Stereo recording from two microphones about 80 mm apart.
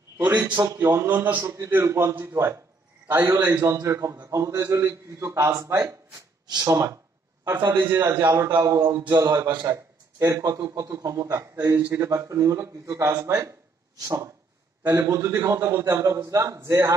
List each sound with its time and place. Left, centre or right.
0.7 s speech: right
1.4 s a man's voice: right
6.4 s speech: right
6.7 s a man's voice: right
7.4 s a man's voice: right